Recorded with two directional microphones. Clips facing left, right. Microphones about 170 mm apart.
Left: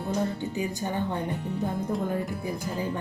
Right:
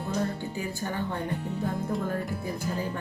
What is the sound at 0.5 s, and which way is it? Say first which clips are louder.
Speech: left 3 dB; 20° left (ahead or behind).